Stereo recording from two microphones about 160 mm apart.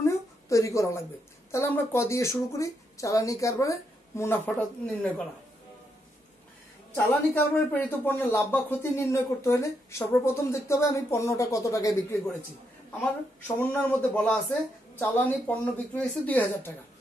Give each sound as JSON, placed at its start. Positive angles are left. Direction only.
{"t": 0.0, "sound": "a sound", "side_deg": 20}
{"t": 1.5, "sound": "a woman's voice", "side_deg": 15}
{"t": 7.0, "sound": "speech", "side_deg": 15}
{"t": 13.6, "sound": "speech", "side_deg": 10}